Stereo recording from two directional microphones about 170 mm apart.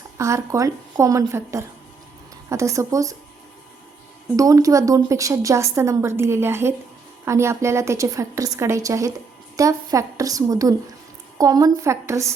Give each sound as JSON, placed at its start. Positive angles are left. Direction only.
{"t": 0.2, "sound": "a woman's voice", "side_deg": -15}
{"t": 4.4, "sound": "a woman's voice", "side_deg": -20}